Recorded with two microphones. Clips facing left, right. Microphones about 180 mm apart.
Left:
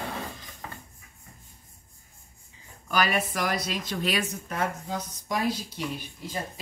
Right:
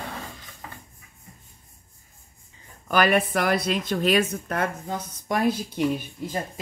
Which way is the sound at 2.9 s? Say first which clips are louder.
Right 6 dB; 55° right (ahead or behind).